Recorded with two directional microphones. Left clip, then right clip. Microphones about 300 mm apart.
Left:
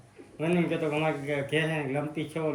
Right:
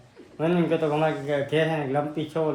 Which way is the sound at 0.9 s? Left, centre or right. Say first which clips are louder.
Right 5 dB; centre.